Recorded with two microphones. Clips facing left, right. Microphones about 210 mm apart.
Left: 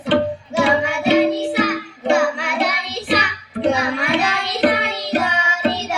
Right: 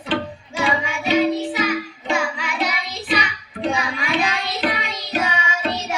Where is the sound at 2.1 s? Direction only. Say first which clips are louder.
Left 7 dB; 60° left (ahead or behind).